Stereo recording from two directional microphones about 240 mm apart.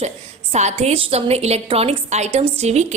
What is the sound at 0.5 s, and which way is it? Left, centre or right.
A woman's voice, right.